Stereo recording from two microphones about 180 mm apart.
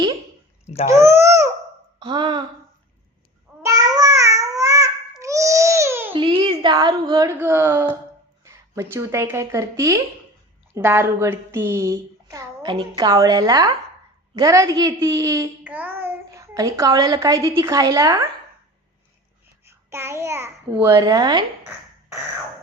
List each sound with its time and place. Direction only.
0.9 s a child's voice: 15° right (ahead or behind)
2.0 s speech: 25° right (ahead or behind)
3.6 s babbling: 20° right (ahead or behind)
6.1 s a woman's voice: 30° right (ahead or behind)
19.6 s a child's voice: 15° right (ahead or behind)